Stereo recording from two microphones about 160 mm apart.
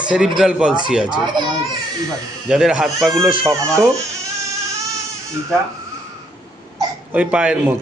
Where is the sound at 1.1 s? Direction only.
30° right (ahead or behind).